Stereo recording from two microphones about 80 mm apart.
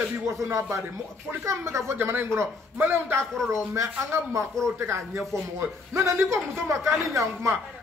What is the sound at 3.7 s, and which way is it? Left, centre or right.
A man's voice, right.